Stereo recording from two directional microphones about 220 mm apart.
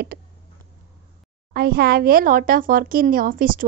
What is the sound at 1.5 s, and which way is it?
A woman's voice, 45° right (ahead or behind).